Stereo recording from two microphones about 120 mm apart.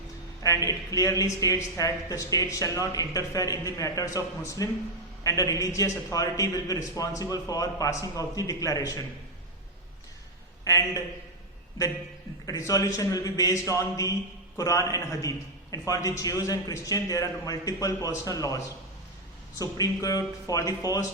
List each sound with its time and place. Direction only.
0.4 s a man's voice: 30° left (ahead or behind)
10.6 s a man's voice: 30° left (ahead or behind)
12.5 s a man's voice: 30° left (ahead or behind)